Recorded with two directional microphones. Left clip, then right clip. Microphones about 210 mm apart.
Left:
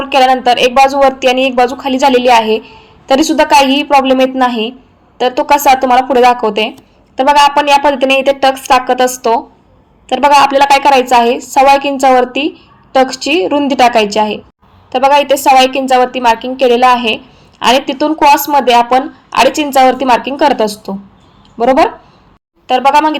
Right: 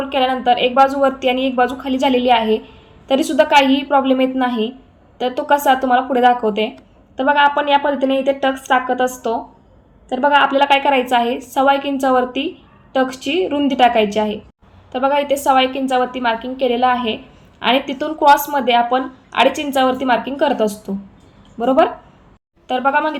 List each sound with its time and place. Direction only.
0.0 s a woman's voice: 20° left (ahead or behind)
10.3 s a woman's voice: 20° left (ahead or behind)
22.6 s a woman's voice: 20° left (ahead or behind)